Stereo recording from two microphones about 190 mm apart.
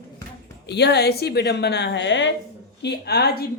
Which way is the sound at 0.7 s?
60° left (ahead or behind).